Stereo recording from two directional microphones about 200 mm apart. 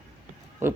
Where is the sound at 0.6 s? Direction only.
15° right (ahead or behind).